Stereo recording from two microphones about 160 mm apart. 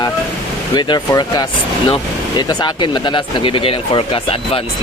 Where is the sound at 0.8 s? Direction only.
25° left (ahead or behind).